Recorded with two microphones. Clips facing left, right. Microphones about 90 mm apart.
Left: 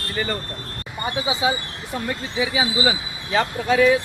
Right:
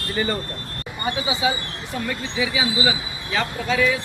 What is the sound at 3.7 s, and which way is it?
Speech, 45° left (ahead or behind).